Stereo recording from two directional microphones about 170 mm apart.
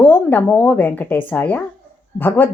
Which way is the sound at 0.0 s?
10° left (ahead or behind).